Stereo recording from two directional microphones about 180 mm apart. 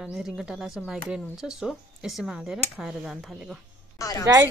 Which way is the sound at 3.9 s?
20° left (ahead or behind).